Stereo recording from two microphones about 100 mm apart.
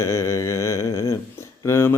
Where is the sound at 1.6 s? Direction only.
25° left (ahead or behind).